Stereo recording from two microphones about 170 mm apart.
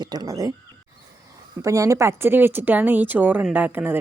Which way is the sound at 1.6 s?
20° right (ahead or behind).